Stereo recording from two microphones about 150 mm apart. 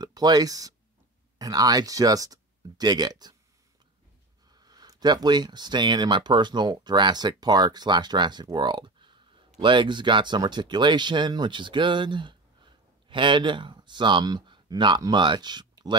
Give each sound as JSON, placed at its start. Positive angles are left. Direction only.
{"t": 0.0, "sound": "speech", "side_deg": -25}
{"t": 4.5, "sound": "speech", "side_deg": -25}